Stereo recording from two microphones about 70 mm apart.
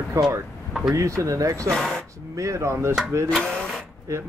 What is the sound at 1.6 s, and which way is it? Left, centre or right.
Speech, centre.